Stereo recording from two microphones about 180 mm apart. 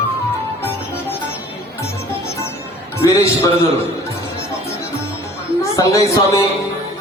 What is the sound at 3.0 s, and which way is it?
Speech, 15° left (ahead or behind).